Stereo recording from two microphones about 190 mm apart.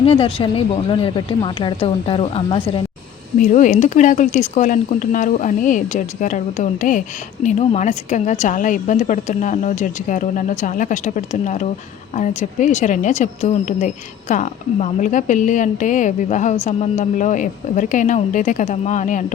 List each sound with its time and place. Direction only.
0.0 s speech: 30° left (ahead or behind)
3.4 s speech: 40° left (ahead or behind)